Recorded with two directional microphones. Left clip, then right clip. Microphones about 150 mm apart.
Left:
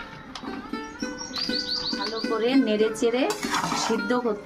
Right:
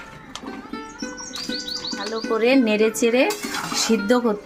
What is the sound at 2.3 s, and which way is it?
Speech, 50° right (ahead or behind).